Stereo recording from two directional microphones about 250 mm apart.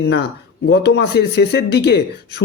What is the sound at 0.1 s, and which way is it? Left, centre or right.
Speech, left.